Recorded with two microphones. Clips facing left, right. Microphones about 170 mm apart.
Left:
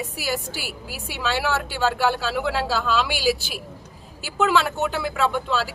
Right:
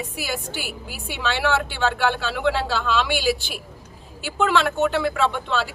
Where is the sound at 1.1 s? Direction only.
5° left (ahead or behind).